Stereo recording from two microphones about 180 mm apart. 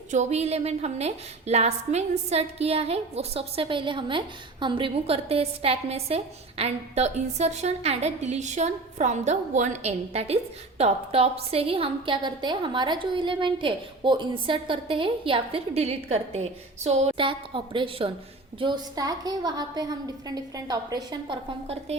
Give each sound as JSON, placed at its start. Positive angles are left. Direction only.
{"t": 0.1, "sound": "a woman's voice", "side_deg": -40}